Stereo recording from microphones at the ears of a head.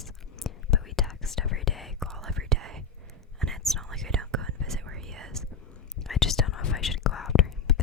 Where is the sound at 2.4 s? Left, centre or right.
Right.